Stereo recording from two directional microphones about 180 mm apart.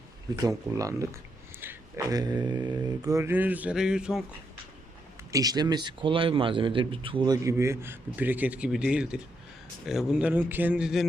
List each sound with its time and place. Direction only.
0.4 s a man's voice: 20° right (ahead or behind)
1.6 s mantra: 20° right (ahead or behind); by 4.2 s 5° right (ahead or behind)
5.3 s a man's voice: 20° right (ahead or behind); by 11.0 s 5° right (ahead or behind)